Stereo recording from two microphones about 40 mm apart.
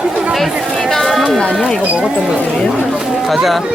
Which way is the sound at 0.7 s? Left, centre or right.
Centre.